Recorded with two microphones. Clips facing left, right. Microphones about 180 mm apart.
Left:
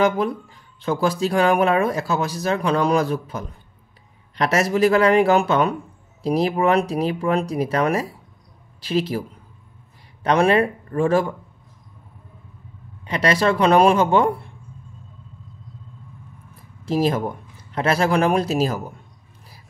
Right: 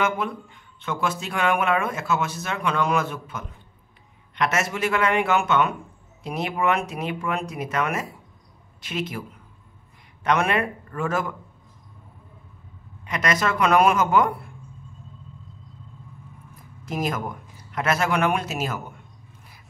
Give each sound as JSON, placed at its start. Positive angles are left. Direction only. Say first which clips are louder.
{"t": 0.0, "sound": "speech", "louder": "left 6 dB", "side_deg": 35}
{"t": 10.2, "sound": "speech", "louder": "left 6 dB", "side_deg": 30}
{"t": 13.0, "sound": "speech", "louder": "left 5 dB", "side_deg": 30}
{"t": 16.8, "sound": "speech", "louder": "left 7 dB", "side_deg": 30}